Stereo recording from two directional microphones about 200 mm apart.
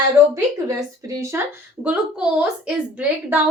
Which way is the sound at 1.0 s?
15° right (ahead or behind).